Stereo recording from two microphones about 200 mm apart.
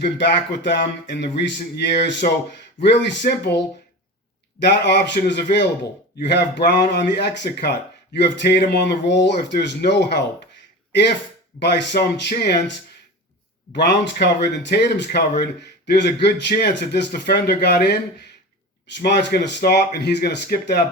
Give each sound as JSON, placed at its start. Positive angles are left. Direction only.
{"t": 0.0, "sound": "speech", "side_deg": 60}
{"t": 4.6, "sound": "speech", "side_deg": 60}
{"t": 11.6, "sound": "speech", "side_deg": 55}
{"t": 13.7, "sound": "a man's voice", "side_deg": 60}